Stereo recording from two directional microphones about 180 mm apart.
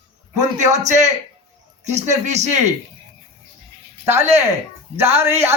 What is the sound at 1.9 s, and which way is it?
Speech, 40° right (ahead or behind).